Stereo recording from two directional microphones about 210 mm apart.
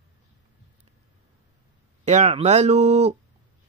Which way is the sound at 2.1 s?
35° right (ahead or behind).